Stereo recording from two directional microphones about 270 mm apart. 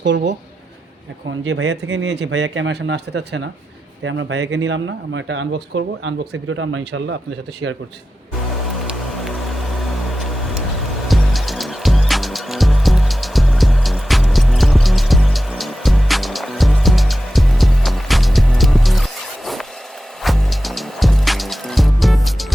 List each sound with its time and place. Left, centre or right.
0.0 s speech: right
1.5 s speech: right
8.8 s music: centre
10.1 s vehicle: centre
11.1 s music: centre